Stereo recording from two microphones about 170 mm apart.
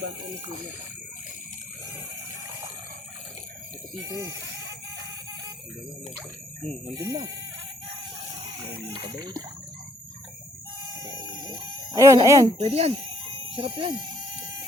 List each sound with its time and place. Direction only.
4.0 s speech: 20° right (ahead or behind)
6.6 s speech: 5° left (ahead or behind)
7.0 s speech: 20° right (ahead or behind)
9.0 s speech: 25° right (ahead or behind)
11.0 s a sound: 25° right (ahead or behind)
12.5 s speech: 40° right (ahead or behind)